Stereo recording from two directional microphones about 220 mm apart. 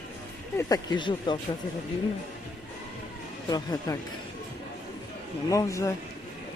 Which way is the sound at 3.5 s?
15° left (ahead or behind).